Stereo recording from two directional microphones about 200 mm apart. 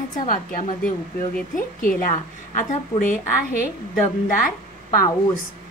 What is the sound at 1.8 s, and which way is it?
A woman's voice, 45° left (ahead or behind).